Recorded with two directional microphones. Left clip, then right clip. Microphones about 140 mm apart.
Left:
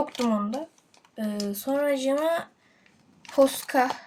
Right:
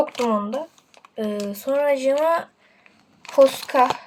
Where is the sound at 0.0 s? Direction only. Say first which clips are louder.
Right 6 dB; 35° right (ahead or behind).